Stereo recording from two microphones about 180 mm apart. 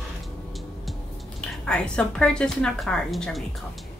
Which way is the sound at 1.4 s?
5° left (ahead or behind).